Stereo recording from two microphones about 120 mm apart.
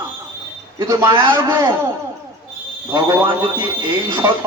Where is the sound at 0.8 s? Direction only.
30° right (ahead or behind).